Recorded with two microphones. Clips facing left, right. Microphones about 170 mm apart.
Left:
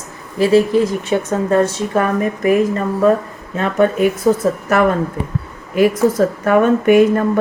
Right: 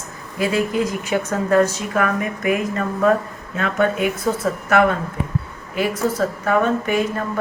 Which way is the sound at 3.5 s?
40° left (ahead or behind).